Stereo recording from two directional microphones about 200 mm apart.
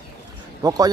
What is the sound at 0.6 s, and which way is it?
Speech, 20° right (ahead or behind).